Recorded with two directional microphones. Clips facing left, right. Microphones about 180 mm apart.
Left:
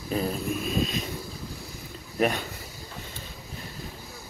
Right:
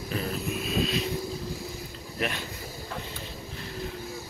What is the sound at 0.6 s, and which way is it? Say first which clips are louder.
Vehicle: even; 45° left (ahead or behind).